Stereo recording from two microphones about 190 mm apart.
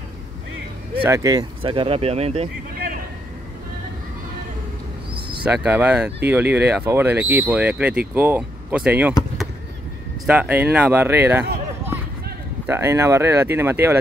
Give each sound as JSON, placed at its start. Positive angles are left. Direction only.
{"t": 1.0, "sound": "speech", "side_deg": -15}
{"t": 5.4, "sound": "speech", "side_deg": -5}
{"t": 10.2, "sound": "speech", "side_deg": -5}
{"t": 12.6, "sound": "speech", "side_deg": -10}